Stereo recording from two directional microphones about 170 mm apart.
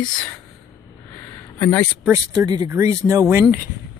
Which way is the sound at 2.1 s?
20° right (ahead or behind).